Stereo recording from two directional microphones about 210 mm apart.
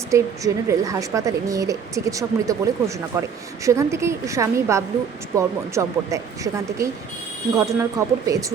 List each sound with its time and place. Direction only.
0.1 s a woman's voice: 15° right (ahead or behind)